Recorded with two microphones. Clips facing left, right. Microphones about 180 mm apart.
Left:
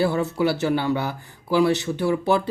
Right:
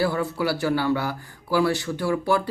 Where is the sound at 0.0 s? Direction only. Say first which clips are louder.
Left 3 dB; 20° left (ahead or behind).